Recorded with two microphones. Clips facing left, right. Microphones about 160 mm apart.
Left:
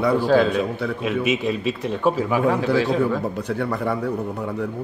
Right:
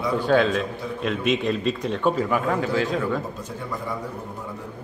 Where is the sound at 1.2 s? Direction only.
5° left (ahead or behind).